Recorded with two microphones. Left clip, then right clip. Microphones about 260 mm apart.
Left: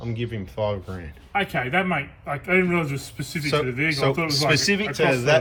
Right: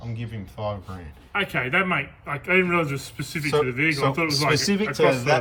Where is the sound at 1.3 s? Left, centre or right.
Centre.